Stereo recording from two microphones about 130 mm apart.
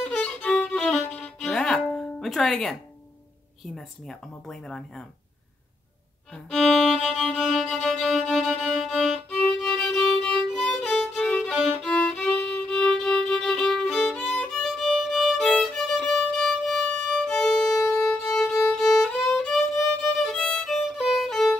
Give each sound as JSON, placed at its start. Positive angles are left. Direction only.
{"t": 0.0, "sound": "music", "side_deg": 5}
{"t": 3.7, "sound": "speech", "side_deg": 5}
{"t": 6.3, "sound": "music", "side_deg": 0}
{"t": 17.8, "sound": "violin", "side_deg": 5}